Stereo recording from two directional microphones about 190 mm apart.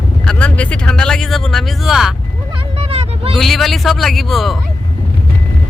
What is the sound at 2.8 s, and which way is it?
Vehicle, 30° right (ahead or behind).